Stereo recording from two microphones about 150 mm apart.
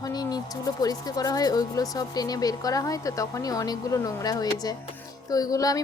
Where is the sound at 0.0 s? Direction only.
25° left (ahead or behind).